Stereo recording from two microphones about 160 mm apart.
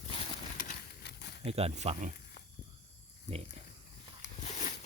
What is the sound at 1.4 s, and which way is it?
Speech, 40° right (ahead or behind).